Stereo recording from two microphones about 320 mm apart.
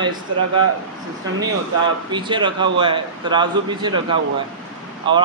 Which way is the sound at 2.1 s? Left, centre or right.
Centre.